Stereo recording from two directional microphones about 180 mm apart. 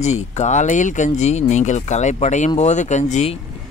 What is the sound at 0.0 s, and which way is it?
A man's voice, 40° left (ahead or behind).